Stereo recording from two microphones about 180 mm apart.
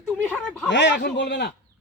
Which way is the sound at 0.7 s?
80° left.